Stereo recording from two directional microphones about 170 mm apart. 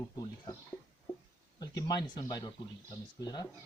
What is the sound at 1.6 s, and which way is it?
Speech, 25° left (ahead or behind).